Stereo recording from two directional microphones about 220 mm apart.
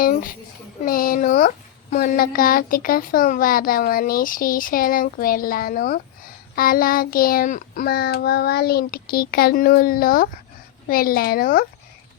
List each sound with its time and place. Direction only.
0.0 s speech: 40° left (ahead or behind)